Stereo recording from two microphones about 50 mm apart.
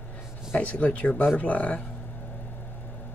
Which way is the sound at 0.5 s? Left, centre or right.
Left.